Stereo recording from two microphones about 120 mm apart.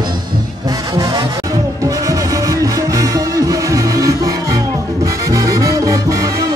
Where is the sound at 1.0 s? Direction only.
35° right (ahead or behind).